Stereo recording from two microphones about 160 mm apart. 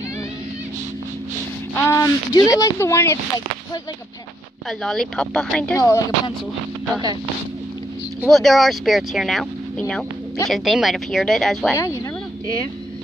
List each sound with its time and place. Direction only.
1.8 s speech: 20° left (ahead or behind)
4.6 s speech: centre (ahead or behind)
5.8 s speech: 20° left (ahead or behind)
8.2 s speech: centre (ahead or behind)
11.7 s speech: 20° left (ahead or behind)